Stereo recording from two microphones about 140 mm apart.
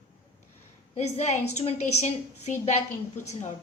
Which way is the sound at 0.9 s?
55° left (ahead or behind).